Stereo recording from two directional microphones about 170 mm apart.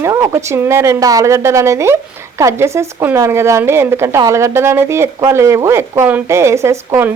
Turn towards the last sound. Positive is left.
turn(degrees=-15)  # may be behind; listen again after turning